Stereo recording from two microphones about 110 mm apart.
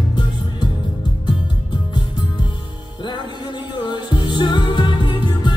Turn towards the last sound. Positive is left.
turn(degrees=45)  # may be behind; listen again after turning